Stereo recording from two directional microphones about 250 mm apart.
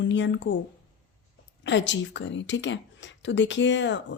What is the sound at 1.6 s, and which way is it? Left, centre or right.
Speech, left.